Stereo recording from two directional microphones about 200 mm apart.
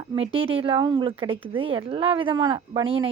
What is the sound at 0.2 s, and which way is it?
Speech, 30° right (ahead or behind).